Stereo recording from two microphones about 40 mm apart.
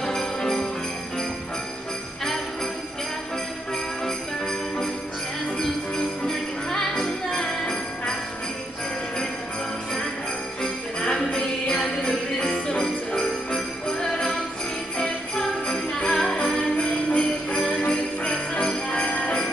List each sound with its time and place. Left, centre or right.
0.0 s jingle bell: centre
4.0 s jingle bell: centre
10.6 s jingle bell: centre